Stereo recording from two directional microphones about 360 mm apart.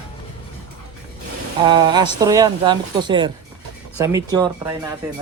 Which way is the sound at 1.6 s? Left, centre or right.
Centre.